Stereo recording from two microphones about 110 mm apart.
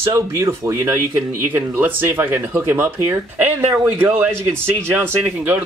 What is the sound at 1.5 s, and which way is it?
Speech, 15° right (ahead or behind).